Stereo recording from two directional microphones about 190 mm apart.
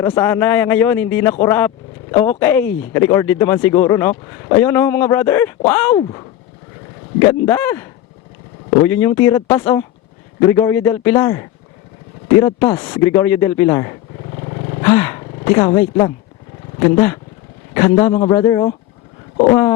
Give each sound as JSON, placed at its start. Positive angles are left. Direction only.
{"t": 0.0, "sound": "a man's voice", "side_deg": 15}
{"t": 7.3, "sound": "a man's voice", "side_deg": 15}
{"t": 14.8, "sound": "a sound", "side_deg": 20}
{"t": 15.2, "sound": "a man's voice", "side_deg": 20}